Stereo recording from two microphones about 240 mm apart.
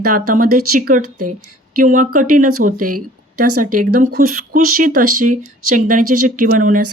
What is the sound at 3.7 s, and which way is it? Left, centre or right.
Speech, right.